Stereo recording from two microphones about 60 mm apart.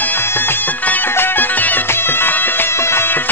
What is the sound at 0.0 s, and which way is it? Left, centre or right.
Music, left.